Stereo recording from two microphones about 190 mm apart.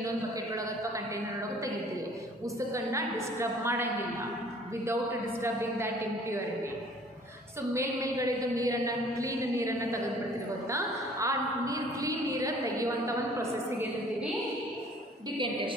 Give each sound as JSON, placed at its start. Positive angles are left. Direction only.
{"t": 2.7, "sound": "speech", "side_deg": -15}
{"t": 5.4, "sound": "speech", "side_deg": -15}
{"t": 7.7, "sound": "speech", "side_deg": -15}